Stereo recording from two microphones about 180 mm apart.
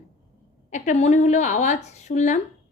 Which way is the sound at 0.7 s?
40° left (ahead or behind).